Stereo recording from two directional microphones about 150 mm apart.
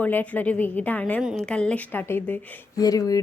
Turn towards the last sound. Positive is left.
turn(degrees=25)  # may be behind; listen again after turning